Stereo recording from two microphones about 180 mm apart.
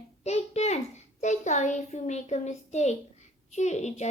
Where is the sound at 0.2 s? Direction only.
40° left (ahead or behind).